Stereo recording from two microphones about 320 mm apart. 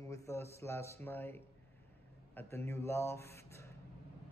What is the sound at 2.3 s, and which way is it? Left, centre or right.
Speech, centre.